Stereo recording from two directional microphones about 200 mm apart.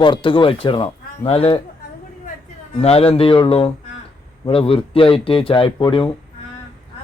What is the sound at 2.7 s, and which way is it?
Speech, 30° left (ahead or behind).